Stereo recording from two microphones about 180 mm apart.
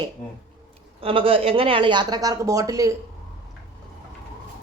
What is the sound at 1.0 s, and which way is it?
Speech, 30° right (ahead or behind).